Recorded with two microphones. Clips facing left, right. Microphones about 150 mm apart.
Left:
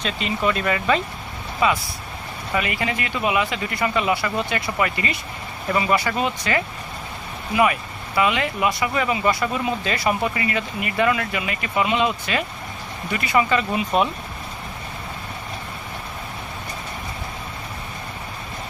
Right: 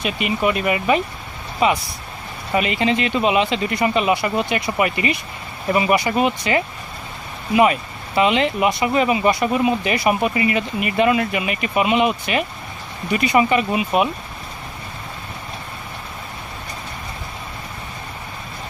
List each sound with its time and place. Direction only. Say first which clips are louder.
0.0 s speech: right 3 dB; 15° right (ahead or behind)